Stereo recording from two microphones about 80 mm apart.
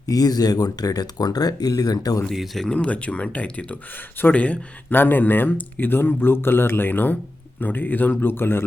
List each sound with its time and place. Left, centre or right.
0.0 s speech: left
2.3 s speech: centre
2.6 s speech: centre